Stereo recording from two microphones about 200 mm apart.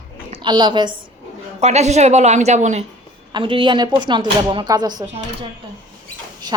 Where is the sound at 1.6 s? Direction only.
35° right (ahead or behind).